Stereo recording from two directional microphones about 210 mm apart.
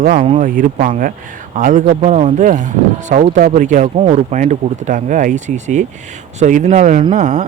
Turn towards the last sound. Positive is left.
turn(degrees=-35)  # may be behind; listen again after turning